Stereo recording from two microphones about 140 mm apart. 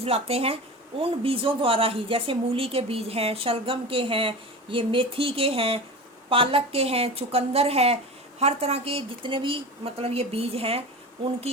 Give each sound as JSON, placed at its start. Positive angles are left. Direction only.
{"t": 0.0, "sound": "speech", "side_deg": -45}